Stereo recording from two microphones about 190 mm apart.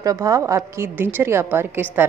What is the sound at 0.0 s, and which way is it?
A woman's voice, 15° right (ahead or behind).